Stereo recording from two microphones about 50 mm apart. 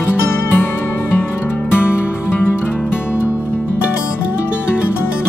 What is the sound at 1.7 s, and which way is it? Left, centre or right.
Music, left.